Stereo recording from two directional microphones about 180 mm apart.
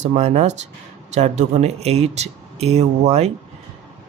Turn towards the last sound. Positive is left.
turn(degrees=-35)  # may be behind; listen again after turning